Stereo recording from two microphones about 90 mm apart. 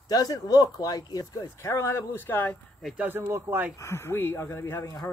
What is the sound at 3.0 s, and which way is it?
Speech, 25° right (ahead or behind).